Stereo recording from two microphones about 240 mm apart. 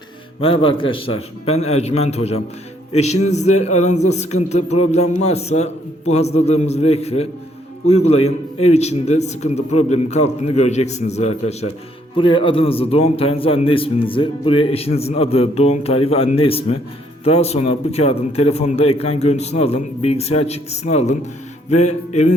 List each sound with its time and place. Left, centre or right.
0.4 s a man's voice: left